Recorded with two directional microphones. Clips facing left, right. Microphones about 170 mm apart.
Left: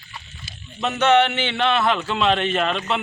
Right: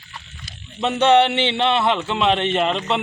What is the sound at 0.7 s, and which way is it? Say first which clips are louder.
A man's voice: right 2 dB; 30° right (ahead or behind).